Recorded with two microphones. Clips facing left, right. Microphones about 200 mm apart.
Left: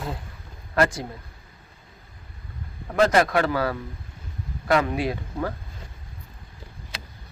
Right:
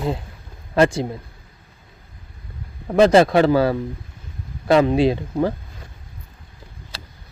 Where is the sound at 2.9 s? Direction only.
25° right (ahead or behind).